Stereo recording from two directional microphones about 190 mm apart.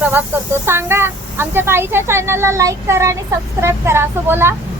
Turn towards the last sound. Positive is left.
turn(degrees=-10)  # may be behind; listen again after turning